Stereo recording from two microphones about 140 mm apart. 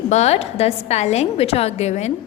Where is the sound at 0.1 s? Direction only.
50° left (ahead or behind).